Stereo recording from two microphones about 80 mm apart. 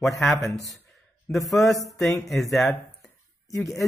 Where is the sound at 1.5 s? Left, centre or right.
Centre.